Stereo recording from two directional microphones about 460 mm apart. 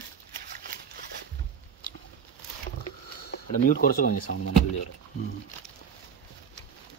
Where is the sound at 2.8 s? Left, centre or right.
Centre.